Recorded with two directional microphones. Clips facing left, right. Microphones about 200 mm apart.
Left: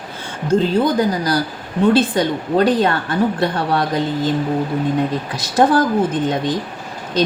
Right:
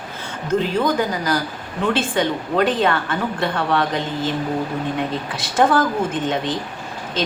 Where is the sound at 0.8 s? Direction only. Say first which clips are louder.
Left 4 dB; 35° left (ahead or behind).